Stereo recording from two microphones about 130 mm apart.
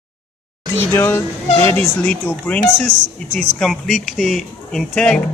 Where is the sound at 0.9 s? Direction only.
20° left (ahead or behind).